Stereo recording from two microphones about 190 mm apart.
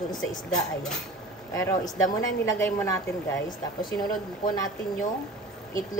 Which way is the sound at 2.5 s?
15° left (ahead or behind).